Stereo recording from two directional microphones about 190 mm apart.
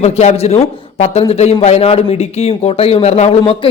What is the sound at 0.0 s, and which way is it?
A man's voice, 35° left (ahead or behind).